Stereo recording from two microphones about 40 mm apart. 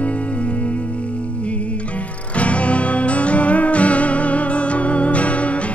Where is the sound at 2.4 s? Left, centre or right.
Left.